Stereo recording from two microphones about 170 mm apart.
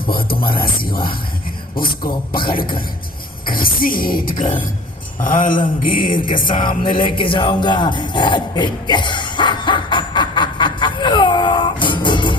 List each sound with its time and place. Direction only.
0.1 s music: 60° left (ahead or behind)
0.9 s speech: 30° left (ahead or behind)
1.8 s music: 60° left (ahead or behind)
3.5 s music: 55° left (ahead or behind)
5.2 s mantra: 55° left (ahead or behind)
6.8 s jingle bell: 30° left (ahead or behind)